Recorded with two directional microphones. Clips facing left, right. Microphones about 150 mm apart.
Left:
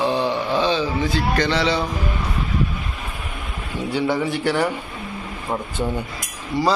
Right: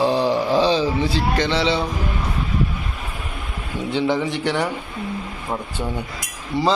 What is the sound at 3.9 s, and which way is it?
Speech, 20° right (ahead or behind).